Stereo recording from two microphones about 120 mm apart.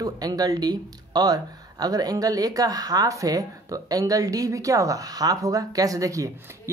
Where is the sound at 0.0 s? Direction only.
30° right (ahead or behind).